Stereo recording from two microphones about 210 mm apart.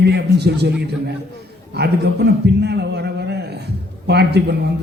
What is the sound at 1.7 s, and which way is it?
A man's voice, 50° right (ahead or behind).